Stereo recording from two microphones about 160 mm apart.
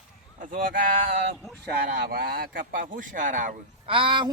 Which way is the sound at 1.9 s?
70° right (ahead or behind).